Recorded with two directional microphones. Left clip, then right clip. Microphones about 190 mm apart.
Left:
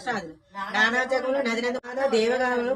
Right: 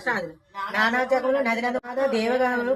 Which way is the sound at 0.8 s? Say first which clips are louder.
Right 1 dB; centre (ahead or behind).